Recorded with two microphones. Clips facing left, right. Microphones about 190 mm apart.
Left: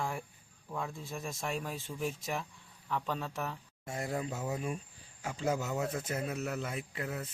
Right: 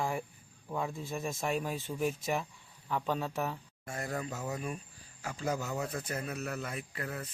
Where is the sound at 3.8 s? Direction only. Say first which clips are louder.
Left 2 dB; 20° left (ahead or behind).